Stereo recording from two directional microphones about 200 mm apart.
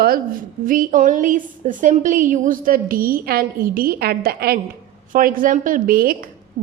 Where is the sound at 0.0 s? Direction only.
45° right (ahead or behind).